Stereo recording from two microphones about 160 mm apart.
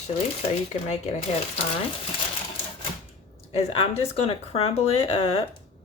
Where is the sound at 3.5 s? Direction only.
40° left (ahead or behind).